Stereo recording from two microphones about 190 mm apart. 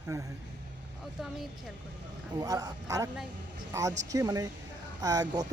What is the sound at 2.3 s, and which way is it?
Speech, 20° right (ahead or behind).